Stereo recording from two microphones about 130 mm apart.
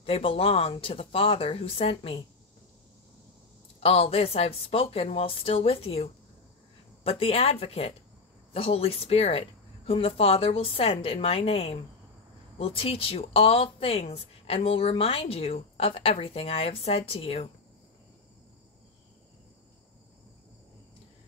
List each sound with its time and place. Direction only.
0.0 s speech: 45° left (ahead or behind)
3.8 s speech: 50° left (ahead or behind)